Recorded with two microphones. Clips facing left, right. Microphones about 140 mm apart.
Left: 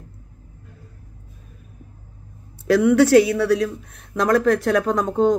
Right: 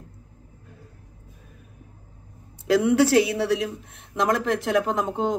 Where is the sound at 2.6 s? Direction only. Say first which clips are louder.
Left 4 dB; 25° right (ahead or behind).